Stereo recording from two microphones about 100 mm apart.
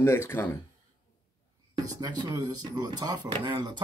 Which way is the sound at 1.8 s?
40° right (ahead or behind).